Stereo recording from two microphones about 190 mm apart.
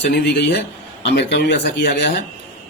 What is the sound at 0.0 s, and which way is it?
Speech, 60° left (ahead or behind).